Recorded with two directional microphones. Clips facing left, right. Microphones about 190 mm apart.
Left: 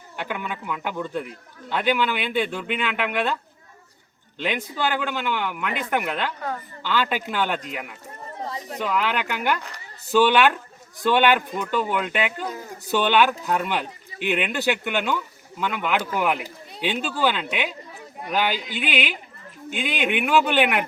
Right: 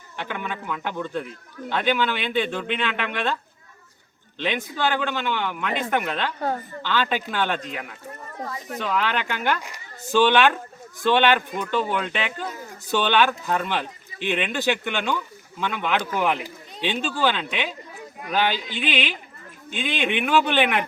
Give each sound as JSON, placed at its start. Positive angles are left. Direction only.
{"t": 0.2, "sound": "speech", "side_deg": 10}
{"t": 4.4, "sound": "speech", "side_deg": 10}
{"t": 8.2, "sound": "speech", "side_deg": 25}
{"t": 8.8, "sound": "speech", "side_deg": 10}